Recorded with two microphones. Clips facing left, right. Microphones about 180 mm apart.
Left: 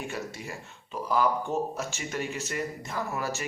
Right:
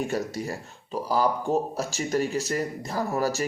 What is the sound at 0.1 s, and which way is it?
Speech, 40° right (ahead or behind).